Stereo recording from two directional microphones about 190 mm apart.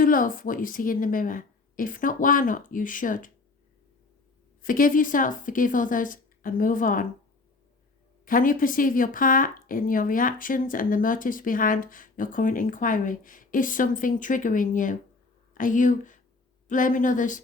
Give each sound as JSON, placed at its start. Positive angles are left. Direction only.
{"t": 0.0, "sound": "speech", "side_deg": 45}
{"t": 4.6, "sound": "speech", "side_deg": 45}
{"t": 8.2, "sound": "speech", "side_deg": 45}